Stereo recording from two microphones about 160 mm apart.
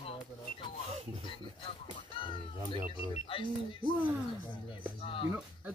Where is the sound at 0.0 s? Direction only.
35° left (ahead or behind).